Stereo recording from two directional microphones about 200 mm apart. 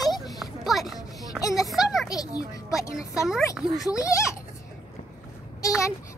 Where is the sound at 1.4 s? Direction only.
15° left (ahead or behind).